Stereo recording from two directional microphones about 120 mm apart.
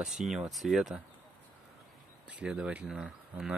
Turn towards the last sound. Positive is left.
turn(degrees=-5)  # may be behind; listen again after turning